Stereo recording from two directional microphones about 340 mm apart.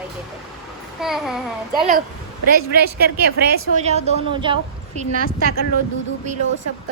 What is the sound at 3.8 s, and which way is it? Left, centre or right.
Speech, centre.